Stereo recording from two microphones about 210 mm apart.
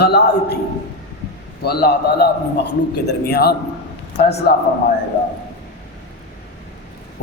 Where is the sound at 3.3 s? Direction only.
50° left (ahead or behind).